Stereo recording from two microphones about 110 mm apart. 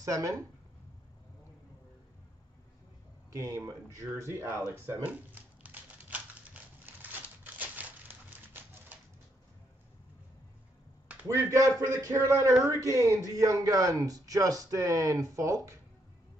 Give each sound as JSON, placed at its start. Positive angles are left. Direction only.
{"t": 0.0, "sound": "speech", "side_deg": -30}
{"t": 3.3, "sound": "speech", "side_deg": -30}
{"t": 4.7, "sound": "typewriter", "side_deg": -20}
{"t": 11.2, "sound": "speech", "side_deg": -30}